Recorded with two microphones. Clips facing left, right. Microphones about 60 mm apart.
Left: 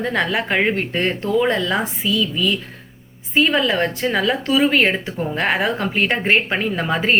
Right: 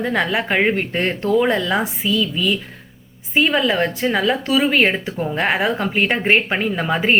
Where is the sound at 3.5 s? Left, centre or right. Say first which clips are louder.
Even; centre.